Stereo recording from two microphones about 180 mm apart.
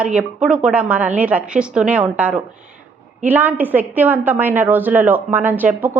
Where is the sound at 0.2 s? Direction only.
5° right (ahead or behind).